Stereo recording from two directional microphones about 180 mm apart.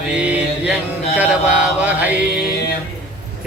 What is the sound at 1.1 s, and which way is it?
Mantra, 10° right (ahead or behind).